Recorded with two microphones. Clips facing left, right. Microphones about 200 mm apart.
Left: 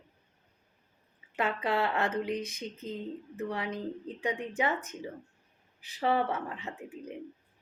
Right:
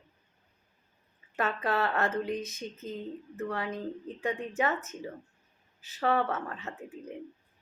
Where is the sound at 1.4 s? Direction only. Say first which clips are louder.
Even; 15° left (ahead or behind).